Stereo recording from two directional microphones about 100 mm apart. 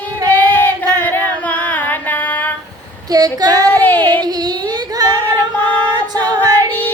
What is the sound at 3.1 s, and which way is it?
Female singing, 40° right (ahead or behind).